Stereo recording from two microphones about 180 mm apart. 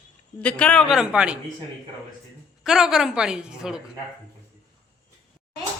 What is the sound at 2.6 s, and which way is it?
Speech, 5° right (ahead or behind).